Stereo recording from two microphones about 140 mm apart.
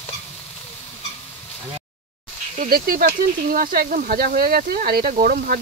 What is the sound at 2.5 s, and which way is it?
Speech, 85° right.